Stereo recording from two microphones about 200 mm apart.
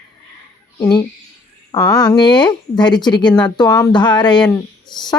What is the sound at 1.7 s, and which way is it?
Speech, 20° left (ahead or behind).